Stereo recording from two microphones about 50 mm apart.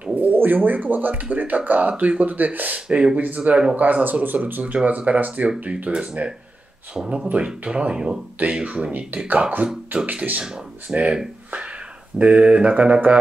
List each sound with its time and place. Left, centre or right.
0.1 s speech: right
3.8 s speech: right; by 8.2 s centre
8.4 s speech: right
10.9 s speech: centre
12.2 s speech: right